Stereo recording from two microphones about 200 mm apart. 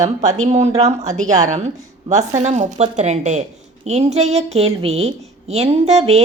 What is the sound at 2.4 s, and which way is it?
A woman's voice, 35° right (ahead or behind).